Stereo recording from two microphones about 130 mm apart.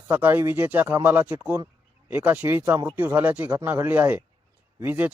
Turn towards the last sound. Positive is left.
turn(degrees=-15)  # may be behind; listen again after turning